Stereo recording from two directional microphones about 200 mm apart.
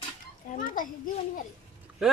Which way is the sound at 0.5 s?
40° left (ahead or behind).